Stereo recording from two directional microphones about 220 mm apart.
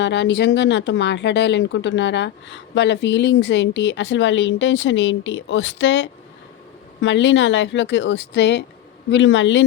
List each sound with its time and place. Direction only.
0.0 s speech: 55° left (ahead or behind)